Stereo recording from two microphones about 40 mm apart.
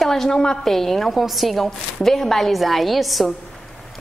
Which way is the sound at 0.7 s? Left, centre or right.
Centre.